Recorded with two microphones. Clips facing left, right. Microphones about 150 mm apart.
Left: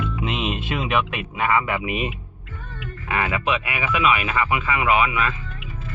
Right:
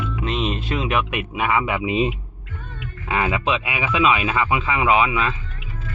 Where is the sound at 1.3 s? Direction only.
15° right (ahead or behind).